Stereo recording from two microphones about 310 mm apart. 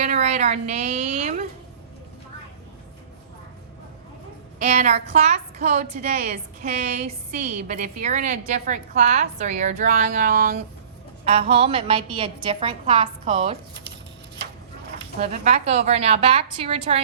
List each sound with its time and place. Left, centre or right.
0.0 s a woman's voice: right
4.6 s a woman's voice: right
15.2 s a woman's voice: right